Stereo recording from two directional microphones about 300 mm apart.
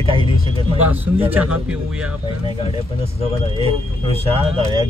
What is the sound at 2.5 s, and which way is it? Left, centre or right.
Speech, centre.